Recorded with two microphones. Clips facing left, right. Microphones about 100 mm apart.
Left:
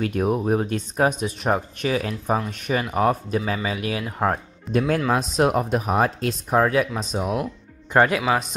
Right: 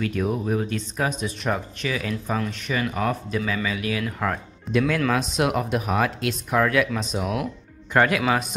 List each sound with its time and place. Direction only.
0.0 s speech: 45° left (ahead or behind)
2.5 s speech: 45° left (ahead or behind)
2.8 s speech: 35° left (ahead or behind)
7.2 s speech: centre (ahead or behind)
7.9 s speech: 25° left (ahead or behind)